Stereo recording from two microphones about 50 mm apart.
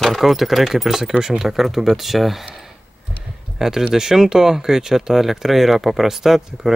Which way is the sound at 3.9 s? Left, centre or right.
Centre.